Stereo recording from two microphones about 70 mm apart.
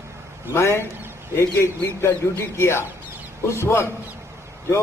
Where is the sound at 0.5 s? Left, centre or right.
Left.